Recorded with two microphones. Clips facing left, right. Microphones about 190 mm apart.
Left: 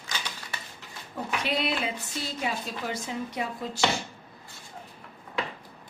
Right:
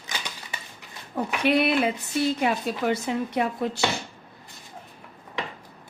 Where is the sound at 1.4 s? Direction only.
60° right (ahead or behind).